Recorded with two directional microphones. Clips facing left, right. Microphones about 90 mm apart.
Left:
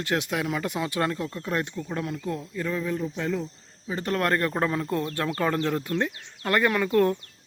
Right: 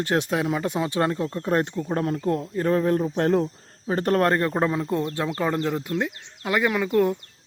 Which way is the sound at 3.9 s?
45° right (ahead or behind).